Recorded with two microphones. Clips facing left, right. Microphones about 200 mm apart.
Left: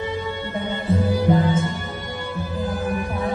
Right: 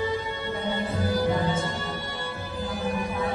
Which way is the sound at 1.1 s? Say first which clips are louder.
Left 4 dB; 55° left (ahead or behind).